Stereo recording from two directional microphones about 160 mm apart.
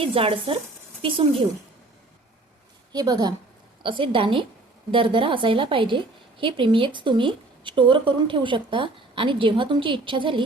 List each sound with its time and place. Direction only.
0.0 s a woman's voice: 35° right (ahead or behind)
2.9 s a woman's voice: 25° right (ahead or behind)